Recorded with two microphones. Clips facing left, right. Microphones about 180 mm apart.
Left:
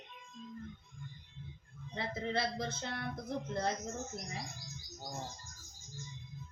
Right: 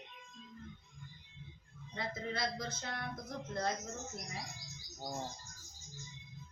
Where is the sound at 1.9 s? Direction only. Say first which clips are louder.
Left 4 dB; 30° left (ahead or behind).